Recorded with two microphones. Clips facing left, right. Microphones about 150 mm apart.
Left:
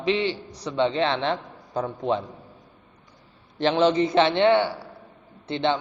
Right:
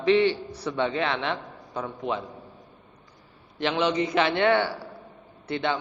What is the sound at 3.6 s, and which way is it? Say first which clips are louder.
Speech: left 5 dB; 30° left (ahead or behind).